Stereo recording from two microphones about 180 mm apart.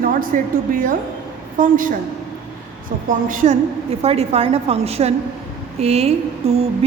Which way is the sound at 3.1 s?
45° right (ahead or behind).